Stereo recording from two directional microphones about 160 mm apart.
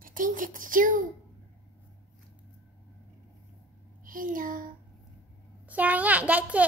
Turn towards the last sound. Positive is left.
turn(degrees=-10)  # may be behind; listen again after turning